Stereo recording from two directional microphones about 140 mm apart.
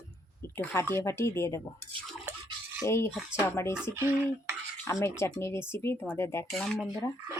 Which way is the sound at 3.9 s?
20° right (ahead or behind).